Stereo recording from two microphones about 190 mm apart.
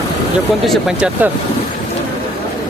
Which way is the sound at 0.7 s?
5° right (ahead or behind).